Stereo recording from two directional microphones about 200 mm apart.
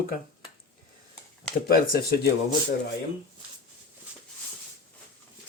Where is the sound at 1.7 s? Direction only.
50° left (ahead or behind).